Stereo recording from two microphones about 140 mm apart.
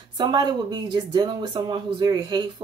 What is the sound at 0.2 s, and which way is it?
Speech, 30° right (ahead or behind).